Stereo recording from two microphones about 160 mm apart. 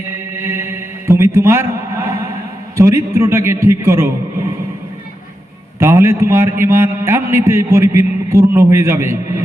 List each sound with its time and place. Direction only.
0.3 s music: 15° right (ahead or behind)
2.7 s a man's voice: 20° right (ahead or behind)
5.8 s a man's voice: 15° right (ahead or behind)